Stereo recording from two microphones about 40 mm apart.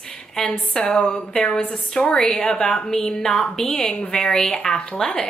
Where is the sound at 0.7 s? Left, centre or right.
Left.